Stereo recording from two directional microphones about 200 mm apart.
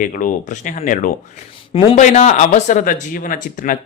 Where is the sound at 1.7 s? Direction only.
25° left (ahead or behind).